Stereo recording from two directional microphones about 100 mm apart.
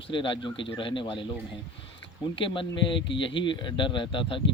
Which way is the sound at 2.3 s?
60° left (ahead or behind).